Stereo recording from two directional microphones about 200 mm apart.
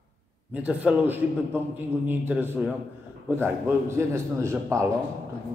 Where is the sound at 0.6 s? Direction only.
10° right (ahead or behind).